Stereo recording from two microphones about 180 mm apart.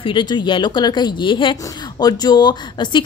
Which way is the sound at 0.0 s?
25° left (ahead or behind).